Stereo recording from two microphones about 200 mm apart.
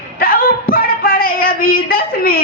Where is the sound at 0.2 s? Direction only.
45° left (ahead or behind).